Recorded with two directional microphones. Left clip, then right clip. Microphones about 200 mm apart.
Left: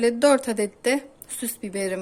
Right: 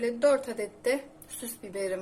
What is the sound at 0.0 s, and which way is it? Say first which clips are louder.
A woman's voice: left 6 dB; 50° left (ahead or behind).